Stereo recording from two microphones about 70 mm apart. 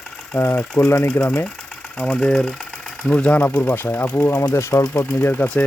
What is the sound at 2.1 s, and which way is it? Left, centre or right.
Speech, centre.